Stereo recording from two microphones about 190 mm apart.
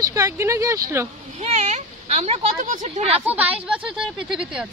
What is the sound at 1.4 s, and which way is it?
Speech, 35° right (ahead or behind).